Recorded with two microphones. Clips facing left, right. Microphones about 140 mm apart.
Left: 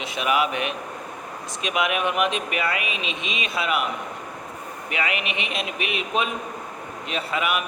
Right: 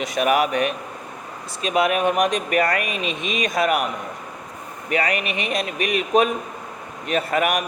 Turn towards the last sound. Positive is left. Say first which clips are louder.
# right 5 dB
turn(degrees=-45)  # may be behind; listen again after turning